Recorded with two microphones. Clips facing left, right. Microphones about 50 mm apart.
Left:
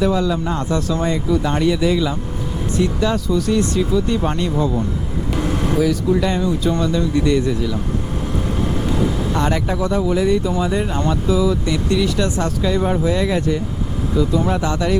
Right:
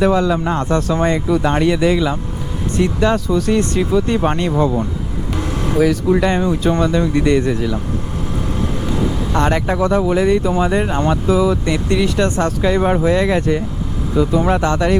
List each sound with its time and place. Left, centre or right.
0.0 s speech: right
5.3 s vehicle: centre
5.8 s speech: right
9.3 s speech: right